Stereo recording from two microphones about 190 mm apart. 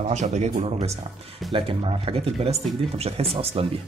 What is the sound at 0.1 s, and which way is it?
Speech, 35° right (ahead or behind).